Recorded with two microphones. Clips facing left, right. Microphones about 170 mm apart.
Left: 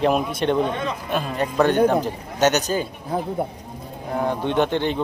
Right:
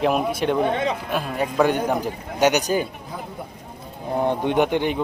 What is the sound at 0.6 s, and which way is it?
Speech, 65° right (ahead or behind).